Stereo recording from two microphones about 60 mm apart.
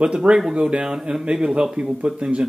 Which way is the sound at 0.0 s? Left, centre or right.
Centre.